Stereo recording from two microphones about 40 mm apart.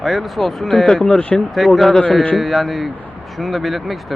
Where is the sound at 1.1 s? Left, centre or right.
Left.